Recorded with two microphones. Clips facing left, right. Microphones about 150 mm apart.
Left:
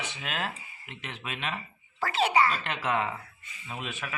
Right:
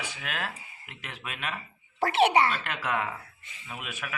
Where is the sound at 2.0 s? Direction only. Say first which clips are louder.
Right 3 dB; 65° right (ahead or behind).